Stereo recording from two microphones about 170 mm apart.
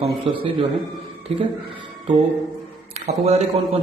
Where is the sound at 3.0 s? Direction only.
40° right (ahead or behind).